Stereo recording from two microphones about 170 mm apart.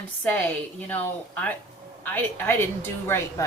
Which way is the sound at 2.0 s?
10° left (ahead or behind).